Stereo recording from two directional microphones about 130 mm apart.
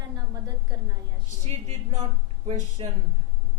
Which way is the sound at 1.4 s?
55° right (ahead or behind).